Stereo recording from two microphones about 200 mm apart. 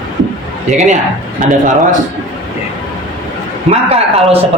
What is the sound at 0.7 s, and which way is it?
Speech, 35° right (ahead or behind).